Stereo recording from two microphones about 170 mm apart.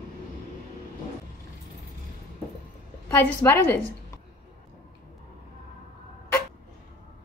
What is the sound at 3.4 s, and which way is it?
Speech, 15° left (ahead or behind).